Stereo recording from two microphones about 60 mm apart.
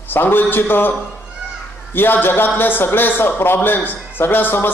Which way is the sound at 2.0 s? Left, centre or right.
Left.